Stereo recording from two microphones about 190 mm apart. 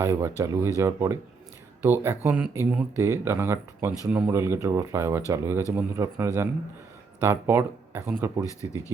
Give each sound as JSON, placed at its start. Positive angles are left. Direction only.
{"t": 0.0, "sound": "speech", "side_deg": -15}